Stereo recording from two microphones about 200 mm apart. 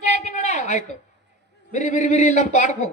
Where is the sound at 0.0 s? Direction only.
35° left (ahead or behind).